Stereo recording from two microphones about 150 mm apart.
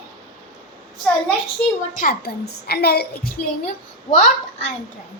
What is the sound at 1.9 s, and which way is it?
A woman's voice, 80° left.